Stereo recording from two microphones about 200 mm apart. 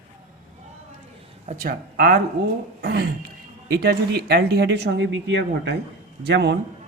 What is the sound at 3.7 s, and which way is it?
Speech, 50° right (ahead or behind).